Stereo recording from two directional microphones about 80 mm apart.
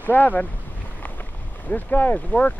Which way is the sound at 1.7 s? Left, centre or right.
Left.